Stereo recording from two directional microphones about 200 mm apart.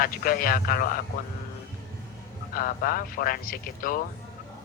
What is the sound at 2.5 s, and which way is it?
A man's voice, 45° left (ahead or behind).